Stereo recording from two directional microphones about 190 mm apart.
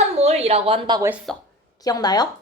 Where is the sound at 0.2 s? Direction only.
30° right (ahead or behind).